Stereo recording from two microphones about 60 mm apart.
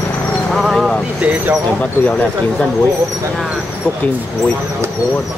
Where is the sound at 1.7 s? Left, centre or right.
Left.